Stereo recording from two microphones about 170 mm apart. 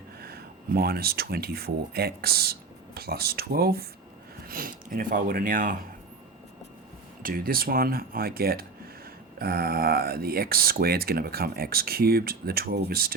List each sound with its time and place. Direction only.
0.2 s speech: 65° right (ahead or behind)
7.2 s speech: 55° right (ahead or behind)